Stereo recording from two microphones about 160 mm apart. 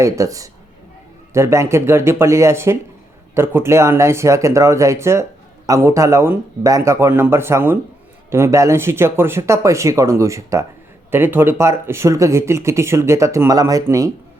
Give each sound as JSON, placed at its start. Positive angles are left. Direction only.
{"t": 0.0, "sound": "speech", "side_deg": -20}